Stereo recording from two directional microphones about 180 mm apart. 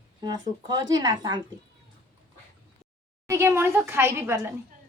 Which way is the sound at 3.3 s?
15° right (ahead or behind).